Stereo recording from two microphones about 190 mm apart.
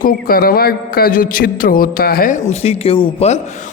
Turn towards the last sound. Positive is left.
turn(degrees=35)  # may be behind; listen again after turning